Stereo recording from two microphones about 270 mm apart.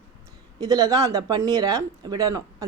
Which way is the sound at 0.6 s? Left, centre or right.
Centre.